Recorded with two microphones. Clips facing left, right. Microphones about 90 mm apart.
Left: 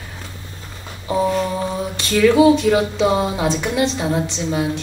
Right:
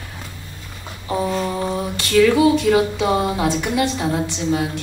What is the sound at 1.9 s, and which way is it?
Speech, 25° left (ahead or behind).